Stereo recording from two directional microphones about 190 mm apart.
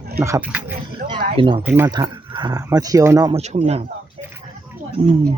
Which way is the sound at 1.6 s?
15° right (ahead or behind).